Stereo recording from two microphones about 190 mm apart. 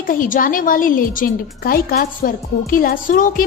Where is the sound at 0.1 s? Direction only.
45° left (ahead or behind).